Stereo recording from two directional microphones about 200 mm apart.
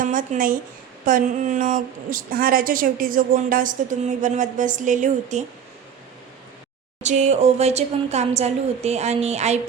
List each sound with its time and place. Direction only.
0.0 s a woman's voice: 40° right (ahead or behind)
7.0 s a woman's voice: 35° right (ahead or behind)